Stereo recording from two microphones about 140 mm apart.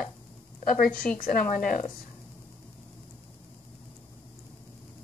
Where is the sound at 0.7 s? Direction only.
80° left.